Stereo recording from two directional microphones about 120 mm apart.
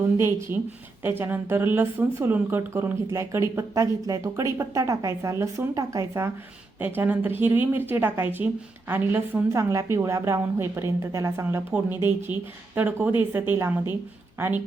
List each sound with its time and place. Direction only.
0.2 s speech: 20° right (ahead or behind)
6.7 s speech: 15° right (ahead or behind)